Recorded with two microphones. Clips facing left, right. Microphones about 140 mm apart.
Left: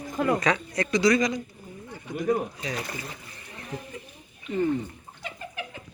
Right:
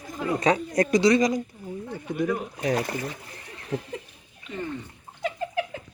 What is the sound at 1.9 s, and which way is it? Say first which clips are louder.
Speech: left 1 dB; 60° right (ahead or behind).